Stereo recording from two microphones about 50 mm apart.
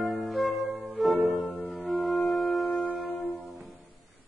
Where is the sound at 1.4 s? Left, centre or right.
Centre.